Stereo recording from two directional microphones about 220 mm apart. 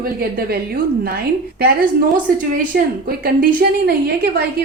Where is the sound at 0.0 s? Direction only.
45° right (ahead or behind).